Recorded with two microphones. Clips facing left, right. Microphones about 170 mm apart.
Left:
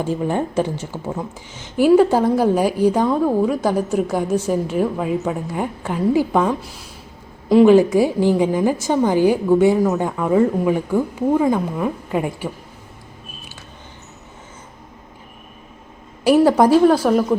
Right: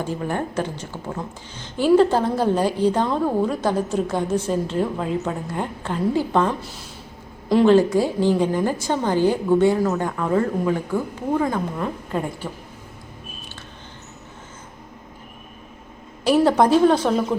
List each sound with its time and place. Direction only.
0.0 s a woman's voice: 15° left (ahead or behind)
16.2 s a woman's voice: 5° left (ahead or behind)